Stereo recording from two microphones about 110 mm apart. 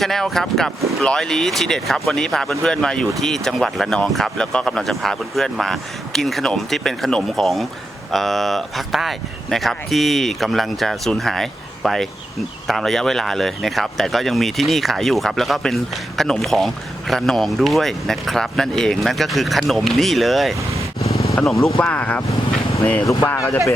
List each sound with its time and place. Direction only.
0.0 s speech: 5° left (ahead or behind)
21.8 s speech: 15° left (ahead or behind)
23.0 s speech: 25° left (ahead or behind)